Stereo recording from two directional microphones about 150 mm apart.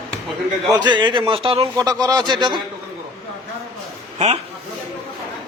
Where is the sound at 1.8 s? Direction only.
25° right (ahead or behind).